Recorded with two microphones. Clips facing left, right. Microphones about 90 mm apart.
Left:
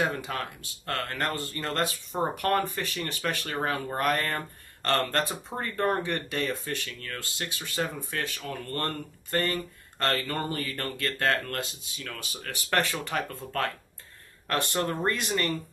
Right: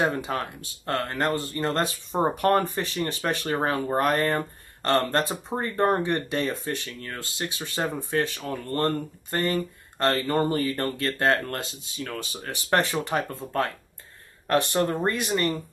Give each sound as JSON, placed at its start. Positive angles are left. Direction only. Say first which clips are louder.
{"t": 0.0, "sound": "speech", "louder": "right 4 dB", "side_deg": -25}
{"t": 14.7, "sound": "speech", "louder": "right 4 dB", "side_deg": -20}